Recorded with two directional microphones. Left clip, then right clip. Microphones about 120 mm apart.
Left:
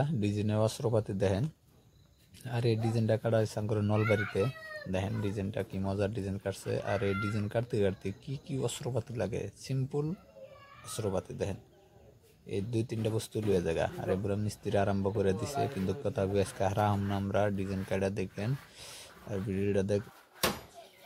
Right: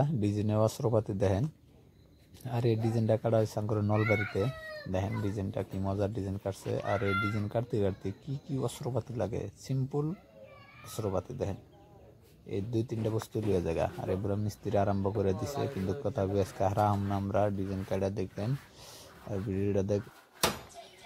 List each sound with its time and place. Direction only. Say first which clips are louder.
0.0 s speech: right 2 dB; 15° right (ahead or behind)
11.0 s speech: even; 10° right (ahead or behind)